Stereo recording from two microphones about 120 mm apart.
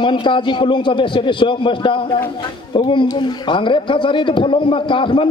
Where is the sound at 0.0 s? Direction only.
40° left (ahead or behind).